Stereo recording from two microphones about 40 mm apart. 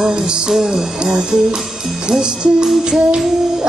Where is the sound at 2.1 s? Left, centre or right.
Centre.